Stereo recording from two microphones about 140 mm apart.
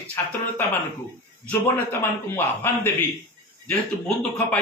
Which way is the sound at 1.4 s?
10° left (ahead or behind).